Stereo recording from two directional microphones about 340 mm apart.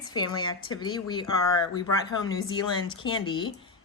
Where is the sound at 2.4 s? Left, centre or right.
Centre.